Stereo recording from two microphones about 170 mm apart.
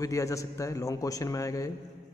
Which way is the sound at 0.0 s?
20° left (ahead or behind).